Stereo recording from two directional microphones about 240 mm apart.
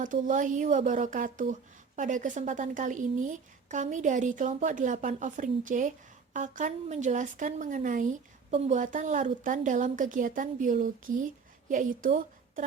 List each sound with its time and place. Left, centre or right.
0.0 s a woman's voice: right